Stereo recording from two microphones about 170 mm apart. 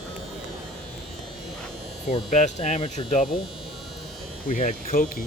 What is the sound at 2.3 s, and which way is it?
Hum, 40° left (ahead or behind).